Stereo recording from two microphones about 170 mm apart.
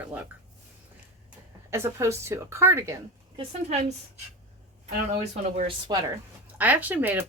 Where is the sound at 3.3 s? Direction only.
40° right (ahead or behind).